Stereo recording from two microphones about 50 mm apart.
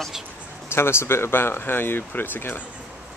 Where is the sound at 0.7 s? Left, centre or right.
Left.